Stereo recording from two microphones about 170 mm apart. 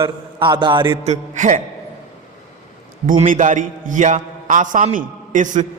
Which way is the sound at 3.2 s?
50° right (ahead or behind).